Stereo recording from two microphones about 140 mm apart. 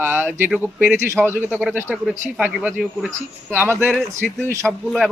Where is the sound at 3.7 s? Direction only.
Centre (ahead or behind).